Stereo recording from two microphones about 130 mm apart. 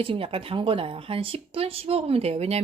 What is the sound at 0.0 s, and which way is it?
Speech, 45° right (ahead or behind).